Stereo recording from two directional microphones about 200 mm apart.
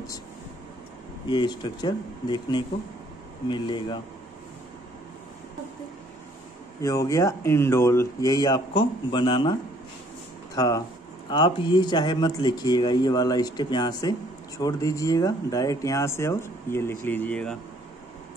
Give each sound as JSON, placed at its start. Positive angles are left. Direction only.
{"t": 1.3, "sound": "speech", "side_deg": 20}
{"t": 6.8, "sound": "speech", "side_deg": 15}